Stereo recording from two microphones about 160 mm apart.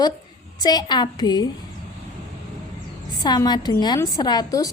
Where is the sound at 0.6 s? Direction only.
25° left (ahead or behind).